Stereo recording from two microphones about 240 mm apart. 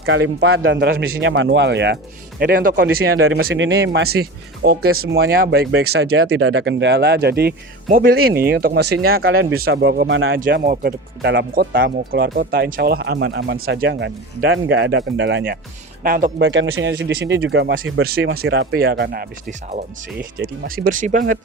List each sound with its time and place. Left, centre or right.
0.0 s speech: right
3.2 s speech: right
4.9 s speech: right
10.4 s speech: right
16.4 s speech: right